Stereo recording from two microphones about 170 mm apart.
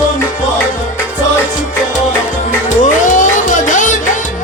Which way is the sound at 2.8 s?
45° left (ahead or behind).